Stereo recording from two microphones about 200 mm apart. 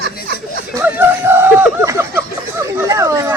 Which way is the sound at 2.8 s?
15° right (ahead or behind).